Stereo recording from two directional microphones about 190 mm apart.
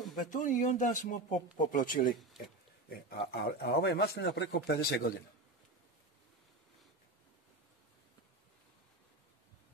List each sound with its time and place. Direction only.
0.1 s speech: 40° left (ahead or behind)
2.9 s speech: 55° left (ahead or behind)